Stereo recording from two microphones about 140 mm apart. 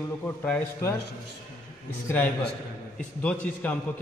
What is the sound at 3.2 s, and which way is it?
Speech, 10° left (ahead or behind).